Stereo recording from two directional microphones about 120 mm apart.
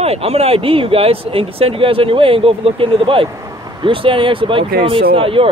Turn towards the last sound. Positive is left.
turn(degrees=-50)  # may be behind; listen again after turning